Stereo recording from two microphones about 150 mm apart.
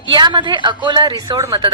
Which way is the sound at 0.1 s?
30° right (ahead or behind).